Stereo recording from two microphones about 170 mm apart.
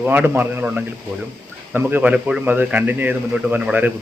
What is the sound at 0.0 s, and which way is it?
Speech, 10° right (ahead or behind).